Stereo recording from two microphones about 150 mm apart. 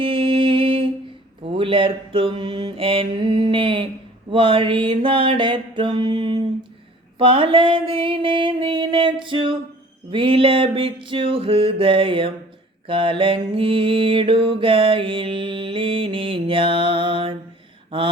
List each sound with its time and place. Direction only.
0.0 s music: 35° right (ahead or behind)
1.5 s mantra: 35° right (ahead or behind)